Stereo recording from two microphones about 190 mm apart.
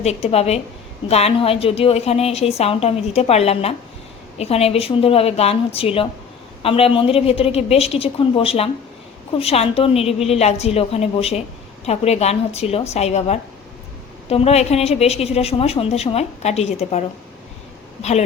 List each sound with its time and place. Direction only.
0.0 s a woman's voice: 35° left (ahead or behind)